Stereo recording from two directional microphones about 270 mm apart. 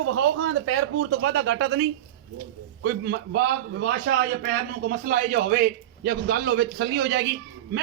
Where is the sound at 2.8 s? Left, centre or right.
Right.